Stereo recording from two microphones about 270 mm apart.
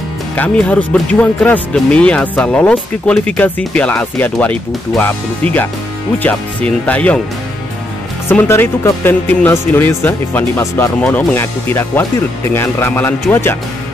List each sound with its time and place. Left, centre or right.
0.4 s speech: centre
8.3 s speech: centre